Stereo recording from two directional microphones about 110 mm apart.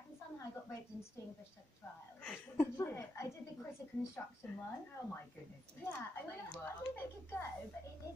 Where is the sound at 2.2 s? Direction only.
20° left (ahead or behind).